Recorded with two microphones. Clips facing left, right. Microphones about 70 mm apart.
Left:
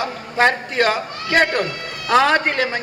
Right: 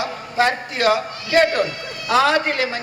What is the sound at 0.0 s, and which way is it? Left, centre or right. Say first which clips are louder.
A man's voice: left 2 dB; left.